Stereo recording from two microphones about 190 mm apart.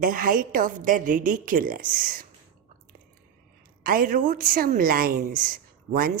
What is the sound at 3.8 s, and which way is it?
A woman's voice, 50° right (ahead or behind).